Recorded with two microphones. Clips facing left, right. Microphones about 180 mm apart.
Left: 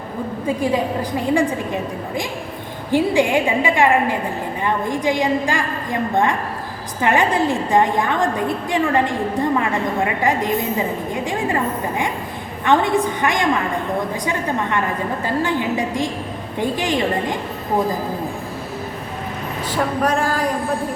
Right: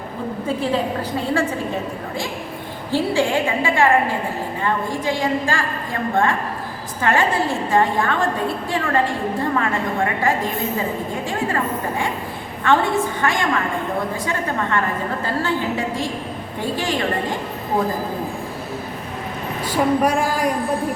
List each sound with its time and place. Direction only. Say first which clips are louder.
0.4 s a woman's voice: left 2 dB; 15° left (ahead or behind)
2.9 s a woman's voice: left 3 dB; 15° left (ahead or behind)
16.6 s a woman's voice: left 3 dB; 20° left (ahead or behind)
19.7 s a sound: right 2 dB; 10° right (ahead or behind)